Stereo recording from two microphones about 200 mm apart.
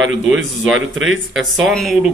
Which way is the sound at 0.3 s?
Centre (ahead or behind).